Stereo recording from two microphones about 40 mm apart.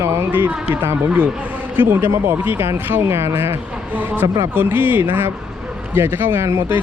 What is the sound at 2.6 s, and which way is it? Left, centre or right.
Speech, right.